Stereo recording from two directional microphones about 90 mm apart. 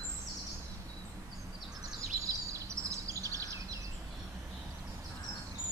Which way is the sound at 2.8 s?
35° right (ahead or behind).